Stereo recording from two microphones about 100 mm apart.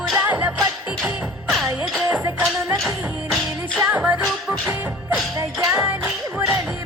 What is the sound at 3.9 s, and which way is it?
Music, 15° right (ahead or behind).